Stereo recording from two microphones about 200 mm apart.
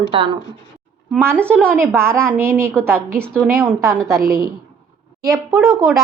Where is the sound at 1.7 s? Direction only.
10° right (ahead or behind).